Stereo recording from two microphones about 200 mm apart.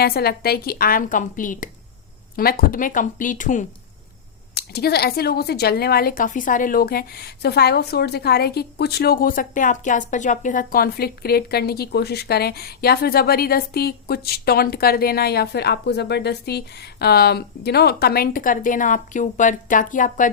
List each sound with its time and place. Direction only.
0.0 s speech: 50° left (ahead or behind)
4.5 s speech: 55° left (ahead or behind)